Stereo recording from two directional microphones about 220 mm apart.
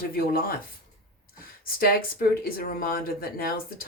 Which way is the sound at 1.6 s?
40° left (ahead or behind).